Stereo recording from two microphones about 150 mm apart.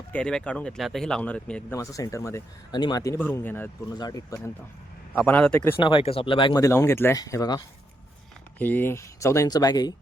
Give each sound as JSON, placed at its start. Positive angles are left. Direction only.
{"t": 0.1, "sound": "speech", "side_deg": 5}
{"t": 1.7, "sound": "speech", "side_deg": 20}
{"t": 3.2, "sound": "speech", "side_deg": 15}
{"t": 3.9, "sound": "speech", "side_deg": 25}
{"t": 5.1, "sound": "speech", "side_deg": 10}
{"t": 5.8, "sound": "speech", "side_deg": 35}
{"t": 6.6, "sound": "speech", "side_deg": 20}
{"t": 8.5, "sound": "speech", "side_deg": 10}